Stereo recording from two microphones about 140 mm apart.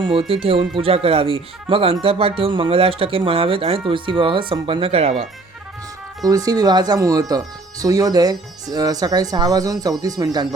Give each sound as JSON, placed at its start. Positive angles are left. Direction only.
{"t": 0.0, "sound": "speech", "side_deg": -40}
{"t": 6.2, "sound": "speech", "side_deg": -25}